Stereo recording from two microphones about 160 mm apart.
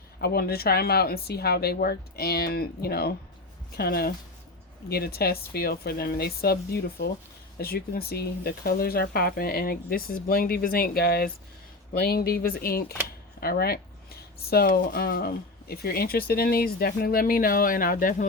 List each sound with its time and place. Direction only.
0.2 s speech: 75° left (ahead or behind); by 18.3 s 55° left (ahead or behind)